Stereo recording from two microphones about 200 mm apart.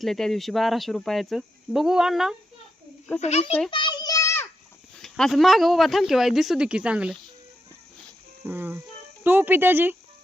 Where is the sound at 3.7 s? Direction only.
25° left (ahead or behind).